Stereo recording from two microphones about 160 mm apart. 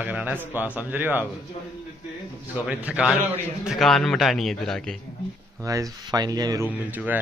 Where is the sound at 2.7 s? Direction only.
10° right (ahead or behind).